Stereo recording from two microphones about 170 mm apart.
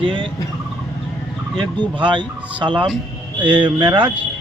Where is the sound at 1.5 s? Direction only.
25° right (ahead or behind).